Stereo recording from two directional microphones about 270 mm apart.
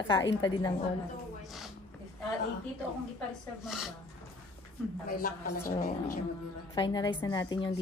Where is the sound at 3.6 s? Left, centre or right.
Centre.